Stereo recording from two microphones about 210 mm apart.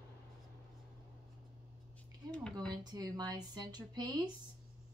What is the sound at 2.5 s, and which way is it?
Speech, 20° right (ahead or behind).